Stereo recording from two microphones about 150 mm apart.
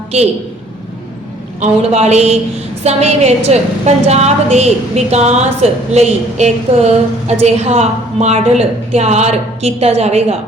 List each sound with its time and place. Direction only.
1.6 s a woman's voice: 45° right (ahead or behind)